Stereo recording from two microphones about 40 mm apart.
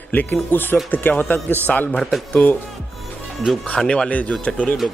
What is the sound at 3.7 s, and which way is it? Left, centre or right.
Speech, left.